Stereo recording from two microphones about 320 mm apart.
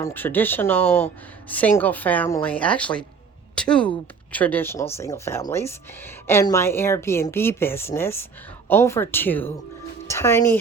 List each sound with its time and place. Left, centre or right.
0.0 s speech: centre